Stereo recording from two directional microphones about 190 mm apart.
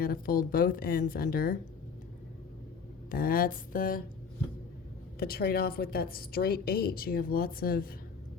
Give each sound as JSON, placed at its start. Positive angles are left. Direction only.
{"t": 0.0, "sound": "a woman's voice", "side_deg": 50}
{"t": 3.1, "sound": "a woman's voice", "side_deg": 50}
{"t": 5.2, "sound": "a woman's voice", "side_deg": 55}